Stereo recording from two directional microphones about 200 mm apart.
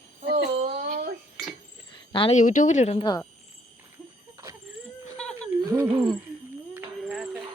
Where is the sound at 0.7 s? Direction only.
50° right (ahead or behind).